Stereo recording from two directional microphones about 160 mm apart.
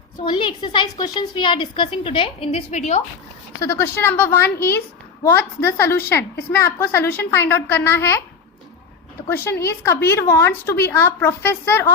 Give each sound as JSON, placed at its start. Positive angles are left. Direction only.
{"t": 0.2, "sound": "a woman's voice", "side_deg": 30}
{"t": 3.6, "sound": "a woman's voice", "side_deg": 15}
{"t": 9.2, "sound": "a woman's voice", "side_deg": 15}